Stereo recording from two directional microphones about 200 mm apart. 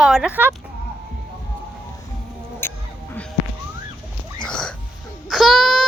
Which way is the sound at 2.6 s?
10° left (ahead or behind).